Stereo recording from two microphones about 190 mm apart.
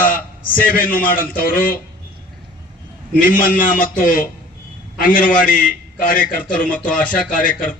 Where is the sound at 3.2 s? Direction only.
45° left (ahead or behind).